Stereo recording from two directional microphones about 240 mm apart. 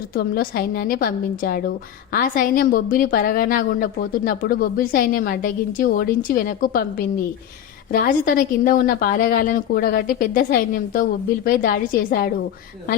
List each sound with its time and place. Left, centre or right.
0.1 s a woman's voice: left